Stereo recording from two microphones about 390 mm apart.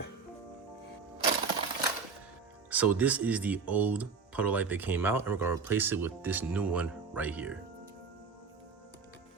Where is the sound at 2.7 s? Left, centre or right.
Centre.